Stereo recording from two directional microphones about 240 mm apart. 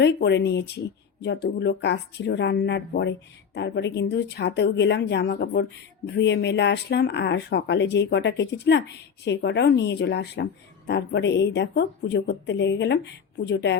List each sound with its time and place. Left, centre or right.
0.0 s speech: left